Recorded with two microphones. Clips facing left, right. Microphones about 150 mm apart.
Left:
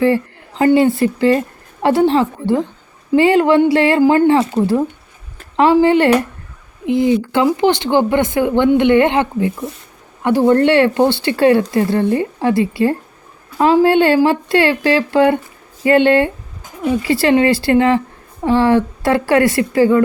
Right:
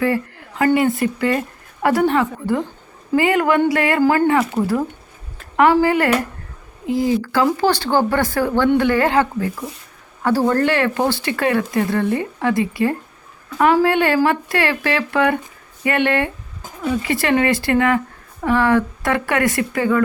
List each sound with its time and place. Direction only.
0.0 s a woman's voice: 30° left (ahead or behind)
5.8 s speech: 25° left (ahead or behind)